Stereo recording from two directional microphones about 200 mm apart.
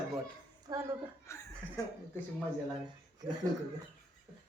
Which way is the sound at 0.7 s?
20° right (ahead or behind).